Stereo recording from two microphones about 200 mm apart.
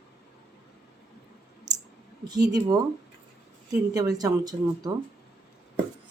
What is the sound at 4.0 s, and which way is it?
Speech, 20° right (ahead or behind).